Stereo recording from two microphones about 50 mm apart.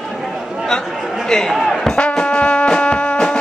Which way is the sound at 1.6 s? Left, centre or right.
Centre.